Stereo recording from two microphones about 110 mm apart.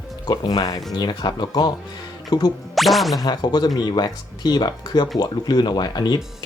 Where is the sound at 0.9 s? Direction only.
40° left (ahead or behind).